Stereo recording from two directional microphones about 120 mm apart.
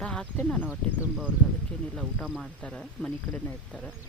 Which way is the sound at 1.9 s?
5° left (ahead or behind).